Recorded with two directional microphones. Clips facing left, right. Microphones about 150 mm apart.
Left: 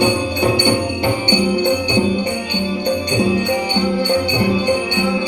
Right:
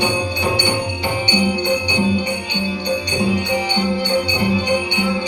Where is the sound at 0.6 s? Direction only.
50° left (ahead or behind).